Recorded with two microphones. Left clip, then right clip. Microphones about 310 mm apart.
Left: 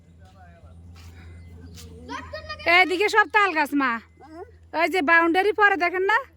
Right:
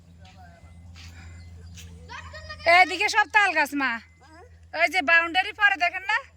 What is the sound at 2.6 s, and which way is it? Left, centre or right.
Speech, centre.